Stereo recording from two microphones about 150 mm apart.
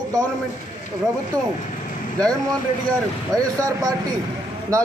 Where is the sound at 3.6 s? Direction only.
20° right (ahead or behind).